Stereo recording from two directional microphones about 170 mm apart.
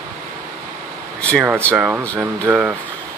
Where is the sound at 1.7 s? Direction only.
5° right (ahead or behind).